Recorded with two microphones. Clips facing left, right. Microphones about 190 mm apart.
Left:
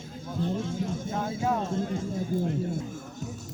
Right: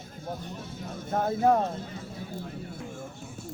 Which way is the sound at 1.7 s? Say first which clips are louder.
Left 9 dB; 45° left (ahead or behind).